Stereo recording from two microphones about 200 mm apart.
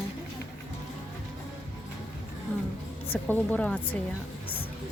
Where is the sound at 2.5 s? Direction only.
10° left (ahead or behind).